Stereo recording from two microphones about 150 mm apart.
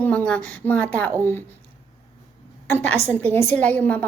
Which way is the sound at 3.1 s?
15° left (ahead or behind).